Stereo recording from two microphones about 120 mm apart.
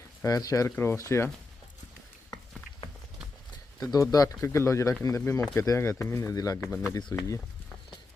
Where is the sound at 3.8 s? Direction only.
30° left (ahead or behind).